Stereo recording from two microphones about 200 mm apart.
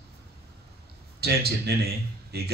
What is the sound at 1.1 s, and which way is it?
A man's voice, 55° right (ahead or behind).